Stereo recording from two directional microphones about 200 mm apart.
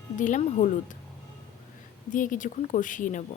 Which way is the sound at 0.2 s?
40° left (ahead or behind).